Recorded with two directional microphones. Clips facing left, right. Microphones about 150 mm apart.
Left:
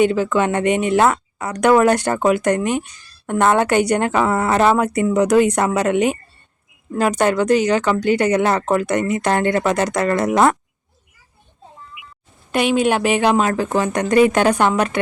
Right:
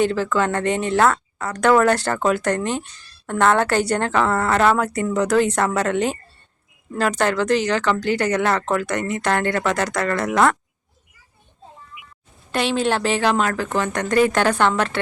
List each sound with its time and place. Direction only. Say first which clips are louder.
0.0 s speech: left 3 dB; 15° left (ahead or behind)
12.5 s speech: left 4 dB; 15° left (ahead or behind)